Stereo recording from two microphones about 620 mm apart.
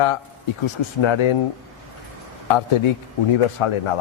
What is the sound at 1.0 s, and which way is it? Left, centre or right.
Speech, left.